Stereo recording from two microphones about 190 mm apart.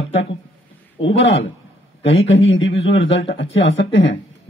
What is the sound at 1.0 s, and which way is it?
Speech, 75° left (ahead or behind).